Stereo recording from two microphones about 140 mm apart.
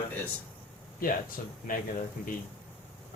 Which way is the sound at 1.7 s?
90° left.